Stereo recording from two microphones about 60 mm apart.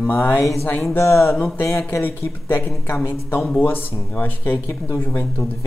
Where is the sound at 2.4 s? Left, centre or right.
Left.